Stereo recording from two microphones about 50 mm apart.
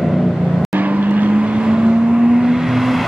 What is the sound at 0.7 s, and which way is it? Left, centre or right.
Vehicle, right.